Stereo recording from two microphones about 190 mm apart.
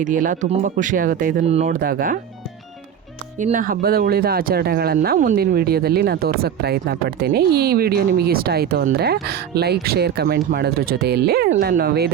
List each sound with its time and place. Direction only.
0.0 s speech: 45° right (ahead or behind)
1.5 s speech: 35° right (ahead or behind)
1.7 s speech: 50° right (ahead or behind)
3.3 s speech: 40° right (ahead or behind)